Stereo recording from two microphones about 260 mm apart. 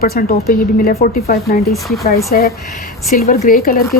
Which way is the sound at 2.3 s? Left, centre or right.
Left.